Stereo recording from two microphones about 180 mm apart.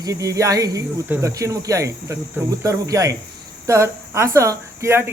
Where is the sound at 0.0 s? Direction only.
20° right (ahead or behind).